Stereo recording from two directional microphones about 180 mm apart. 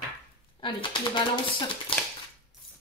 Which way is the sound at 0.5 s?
25° left (ahead or behind).